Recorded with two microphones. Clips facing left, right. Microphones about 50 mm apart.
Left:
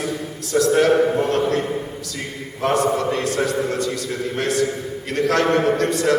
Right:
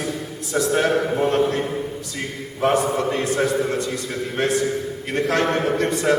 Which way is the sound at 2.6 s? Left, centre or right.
Centre.